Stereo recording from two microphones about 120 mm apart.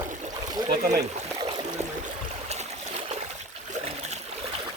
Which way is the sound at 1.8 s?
65° right (ahead or behind).